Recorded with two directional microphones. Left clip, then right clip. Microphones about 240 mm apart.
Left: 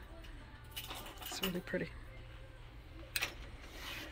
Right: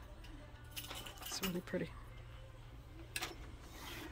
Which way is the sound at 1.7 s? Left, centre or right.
Centre.